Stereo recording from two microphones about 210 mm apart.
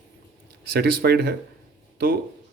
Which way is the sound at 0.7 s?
45° right (ahead or behind).